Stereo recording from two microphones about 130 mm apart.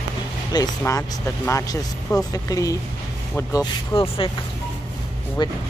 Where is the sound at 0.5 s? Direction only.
30° left (ahead or behind).